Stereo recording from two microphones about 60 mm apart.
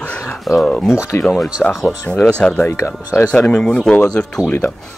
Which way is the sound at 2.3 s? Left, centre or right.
Centre.